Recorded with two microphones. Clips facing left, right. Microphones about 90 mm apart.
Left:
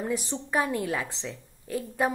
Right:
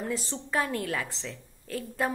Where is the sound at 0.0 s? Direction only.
15° left (ahead or behind).